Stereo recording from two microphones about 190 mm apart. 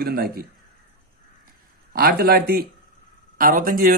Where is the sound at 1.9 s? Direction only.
50° right (ahead or behind).